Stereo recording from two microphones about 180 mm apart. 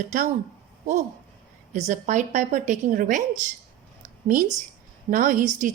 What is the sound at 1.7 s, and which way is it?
A woman's voice, 40° right (ahead or behind).